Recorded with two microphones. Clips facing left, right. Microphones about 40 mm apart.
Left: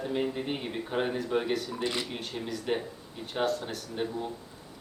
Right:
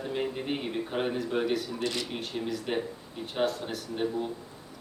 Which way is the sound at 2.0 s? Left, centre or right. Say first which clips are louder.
Right 2 dB; centre.